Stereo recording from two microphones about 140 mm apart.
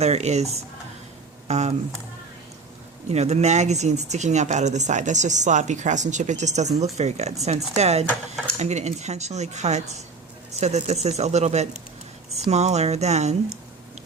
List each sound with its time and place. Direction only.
0.0 s speech: 50° right (ahead or behind)
3.1 s speech: 50° right (ahead or behind)